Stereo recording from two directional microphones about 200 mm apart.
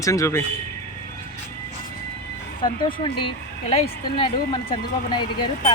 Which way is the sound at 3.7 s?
25° left (ahead or behind).